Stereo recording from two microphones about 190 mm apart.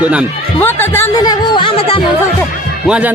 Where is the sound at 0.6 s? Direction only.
10° left (ahead or behind); by 2.0 s 30° left (ahead or behind).